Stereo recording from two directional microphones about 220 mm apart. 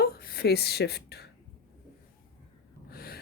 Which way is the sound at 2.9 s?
45° left (ahead or behind).